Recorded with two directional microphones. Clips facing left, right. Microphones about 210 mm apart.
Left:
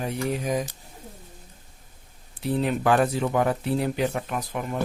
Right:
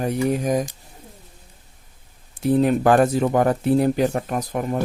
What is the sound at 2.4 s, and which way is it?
Speech, 45° right (ahead or behind).